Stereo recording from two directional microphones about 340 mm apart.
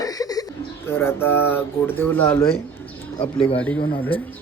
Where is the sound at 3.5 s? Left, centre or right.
Centre.